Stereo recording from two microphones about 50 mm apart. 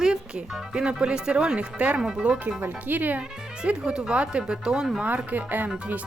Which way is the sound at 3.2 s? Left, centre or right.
Centre.